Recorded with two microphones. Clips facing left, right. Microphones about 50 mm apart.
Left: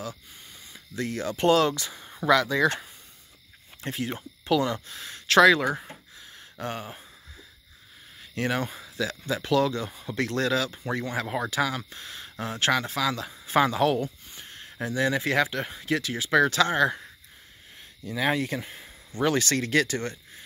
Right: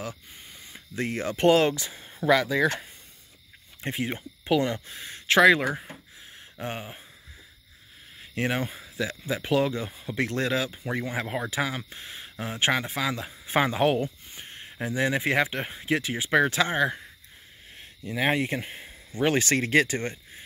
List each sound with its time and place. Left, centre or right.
0.7 s speech: right
2.2 s speech: centre
3.8 s speech: right
5.9 s a sound: centre
8.2 s speech: centre
13.5 s a sound: right
14.8 s speech: centre
17.7 s speech: right